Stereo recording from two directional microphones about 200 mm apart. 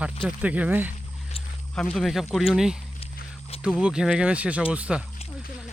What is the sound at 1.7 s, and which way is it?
Speech, 5° left (ahead or behind).